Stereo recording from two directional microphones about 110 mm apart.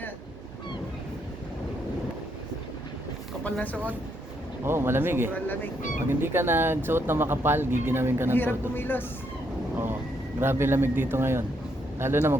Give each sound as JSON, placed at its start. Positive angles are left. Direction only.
{"t": 3.4, "sound": "speech", "side_deg": 15}
{"t": 4.6, "sound": "speech", "side_deg": -20}
{"t": 8.3, "sound": "speech", "side_deg": 20}
{"t": 10.4, "sound": "speech", "side_deg": -20}